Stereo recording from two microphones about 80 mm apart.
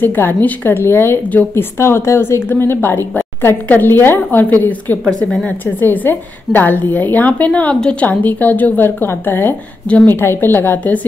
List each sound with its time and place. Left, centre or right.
0.0 s a woman's voice: left